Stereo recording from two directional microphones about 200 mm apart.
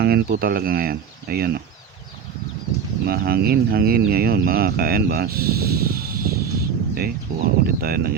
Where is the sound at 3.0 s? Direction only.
50° right (ahead or behind).